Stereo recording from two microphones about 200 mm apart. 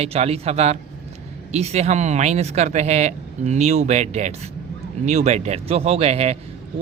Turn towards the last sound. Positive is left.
turn(degrees=-30)  # may be behind; listen again after turning